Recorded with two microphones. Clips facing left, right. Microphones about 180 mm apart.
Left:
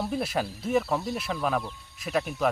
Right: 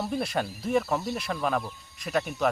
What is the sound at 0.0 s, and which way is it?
Speech, 5° left (ahead or behind).